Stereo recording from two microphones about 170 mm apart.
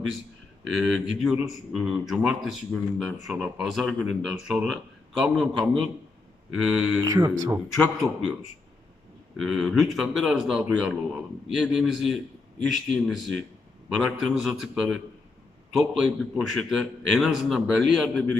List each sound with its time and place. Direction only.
0.6 s speech: centre (ahead or behind)
7.0 s speech: 20° right (ahead or behind)
9.4 s speech: centre (ahead or behind)